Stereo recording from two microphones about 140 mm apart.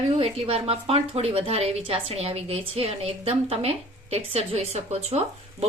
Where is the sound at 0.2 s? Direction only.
45° right (ahead or behind).